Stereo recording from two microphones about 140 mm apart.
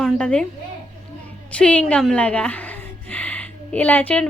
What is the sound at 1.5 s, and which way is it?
A woman's voice, 10° left (ahead or behind).